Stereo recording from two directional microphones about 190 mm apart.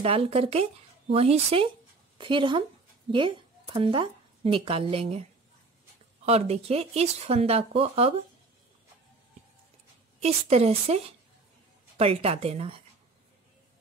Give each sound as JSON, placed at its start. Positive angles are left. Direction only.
{"t": 0.0, "sound": "a woman's voice", "side_deg": -30}
{"t": 6.2, "sound": "speech", "side_deg": -35}
{"t": 10.2, "sound": "speech", "side_deg": -35}